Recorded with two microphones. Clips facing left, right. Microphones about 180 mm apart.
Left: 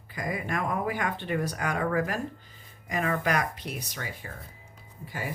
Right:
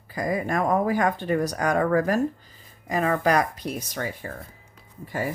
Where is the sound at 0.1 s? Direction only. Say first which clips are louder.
Right 6 dB; 40° right (ahead or behind).